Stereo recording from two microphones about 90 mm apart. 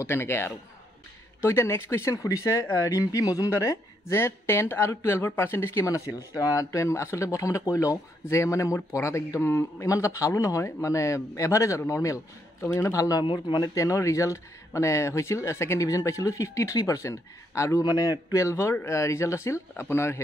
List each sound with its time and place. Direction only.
0.0 s a man's voice: 25° left (ahead or behind)
13.2 s speech: 65° left (ahead or behind)
13.7 s speech: 35° left (ahead or behind)
17.8 s speech: 45° left (ahead or behind); by 20.2 s 30° left (ahead or behind)